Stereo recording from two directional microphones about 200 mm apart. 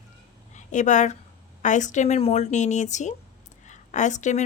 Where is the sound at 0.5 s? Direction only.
40° left (ahead or behind).